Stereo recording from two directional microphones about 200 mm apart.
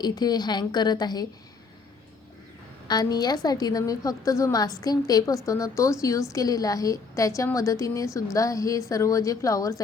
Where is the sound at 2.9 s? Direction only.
20° left (ahead or behind).